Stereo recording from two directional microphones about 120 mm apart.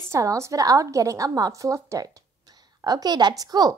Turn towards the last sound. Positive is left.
turn(degrees=-30)  # may be behind; listen again after turning